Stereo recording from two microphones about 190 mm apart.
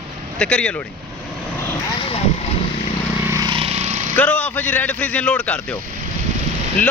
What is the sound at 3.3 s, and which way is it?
Lawn mower, 20° right (ahead or behind).